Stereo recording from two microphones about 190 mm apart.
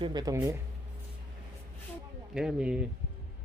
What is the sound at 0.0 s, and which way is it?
Speech, 20° right (ahead or behind).